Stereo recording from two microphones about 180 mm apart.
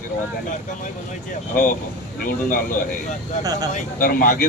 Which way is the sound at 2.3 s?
50° left (ahead or behind).